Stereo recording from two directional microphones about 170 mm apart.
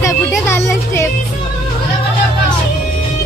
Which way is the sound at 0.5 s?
15° left (ahead or behind).